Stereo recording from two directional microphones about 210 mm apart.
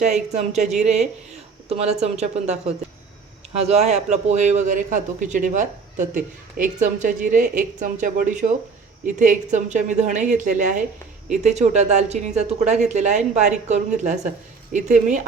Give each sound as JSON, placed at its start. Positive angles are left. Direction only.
{"t": 0.0, "sound": "a man's voice", "side_deg": -35}